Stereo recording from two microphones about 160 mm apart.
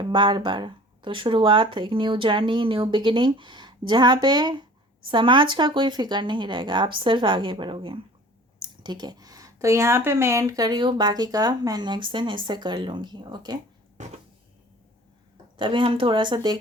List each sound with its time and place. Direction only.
0.0 s speech: 30° right (ahead or behind)
15.5 s speech: 30° right (ahead or behind)